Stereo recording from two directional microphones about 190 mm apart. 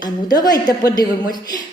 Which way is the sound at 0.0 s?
20° left (ahead or behind).